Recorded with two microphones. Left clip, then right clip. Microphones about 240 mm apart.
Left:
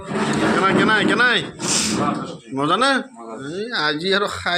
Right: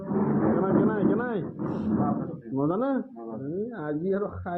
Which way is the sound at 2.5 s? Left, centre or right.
Left.